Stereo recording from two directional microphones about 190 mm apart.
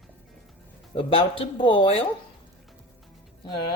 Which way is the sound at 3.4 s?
25° left (ahead or behind).